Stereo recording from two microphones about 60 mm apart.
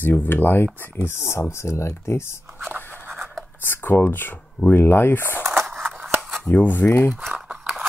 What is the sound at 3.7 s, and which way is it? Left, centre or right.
Speech, left.